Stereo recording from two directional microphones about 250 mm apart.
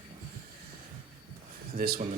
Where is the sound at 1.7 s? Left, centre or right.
Right.